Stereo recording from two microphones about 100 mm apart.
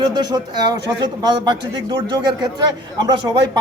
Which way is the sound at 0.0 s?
45° right (ahead or behind).